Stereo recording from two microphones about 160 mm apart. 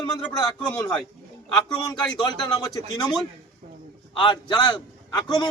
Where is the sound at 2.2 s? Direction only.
25° left (ahead or behind).